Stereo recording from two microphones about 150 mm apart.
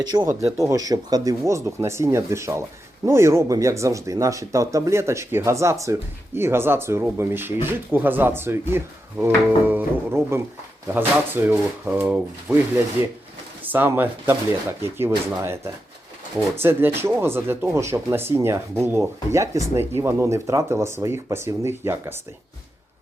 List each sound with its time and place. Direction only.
0.0 s speech: 25° right (ahead or behind)
13.7 s speech: 10° right (ahead or behind)